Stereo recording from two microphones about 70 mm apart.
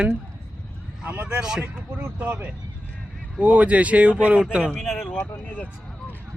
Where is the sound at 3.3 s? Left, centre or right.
Centre.